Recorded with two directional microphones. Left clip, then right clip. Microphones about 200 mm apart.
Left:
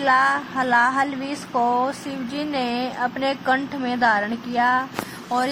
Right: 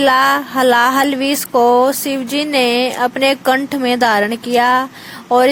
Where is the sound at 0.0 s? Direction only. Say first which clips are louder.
Right 6 dB; 50° right (ahead or behind).